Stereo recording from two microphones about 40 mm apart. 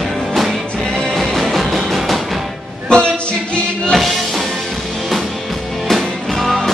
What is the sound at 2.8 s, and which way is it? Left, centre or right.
Music, left.